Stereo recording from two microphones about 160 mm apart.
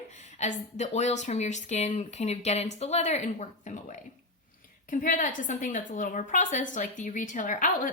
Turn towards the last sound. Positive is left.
turn(degrees=55)  # may be behind; listen again after turning